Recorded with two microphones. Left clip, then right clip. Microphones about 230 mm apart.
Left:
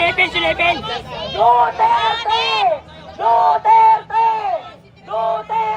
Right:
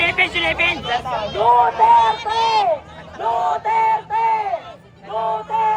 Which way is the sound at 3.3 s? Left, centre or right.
Centre.